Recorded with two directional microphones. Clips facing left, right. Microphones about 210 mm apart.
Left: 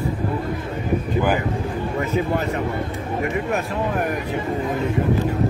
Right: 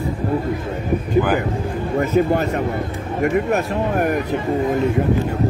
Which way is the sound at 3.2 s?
45° right (ahead or behind).